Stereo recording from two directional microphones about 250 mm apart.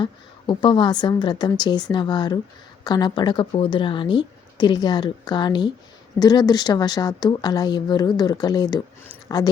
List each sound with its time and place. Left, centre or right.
0.0 s a woman's voice: centre